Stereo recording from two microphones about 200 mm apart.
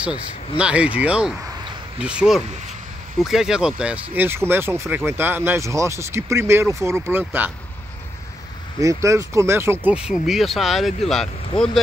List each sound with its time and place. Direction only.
0.0 s speech: 5° right (ahead or behind)
8.7 s speech: 15° right (ahead or behind); by 11.8 s centre (ahead or behind)